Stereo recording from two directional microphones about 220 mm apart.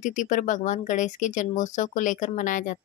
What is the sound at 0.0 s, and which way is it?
Speech, 35° left (ahead or behind).